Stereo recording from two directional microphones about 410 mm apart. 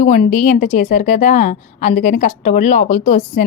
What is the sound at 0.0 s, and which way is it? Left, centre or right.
A woman's voice, centre.